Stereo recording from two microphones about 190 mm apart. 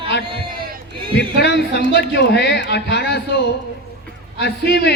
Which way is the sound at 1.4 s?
60° left (ahead or behind).